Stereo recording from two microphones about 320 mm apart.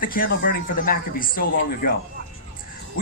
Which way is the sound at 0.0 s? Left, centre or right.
Left.